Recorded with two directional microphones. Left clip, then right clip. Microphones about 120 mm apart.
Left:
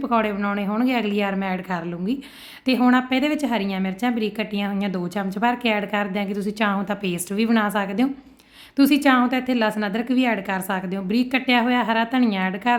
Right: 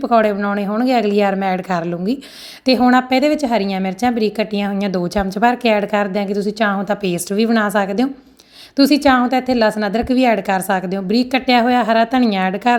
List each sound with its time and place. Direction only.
0.0 s a woman's voice: 30° right (ahead or behind)